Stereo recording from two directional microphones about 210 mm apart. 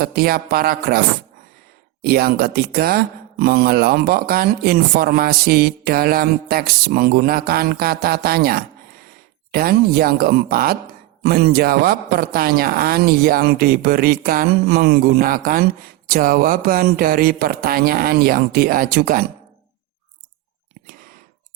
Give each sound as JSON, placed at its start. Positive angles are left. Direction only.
{"t": 0.0, "sound": "speech", "side_deg": -45}